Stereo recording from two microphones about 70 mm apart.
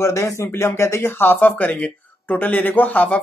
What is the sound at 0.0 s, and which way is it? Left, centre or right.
Speech, left.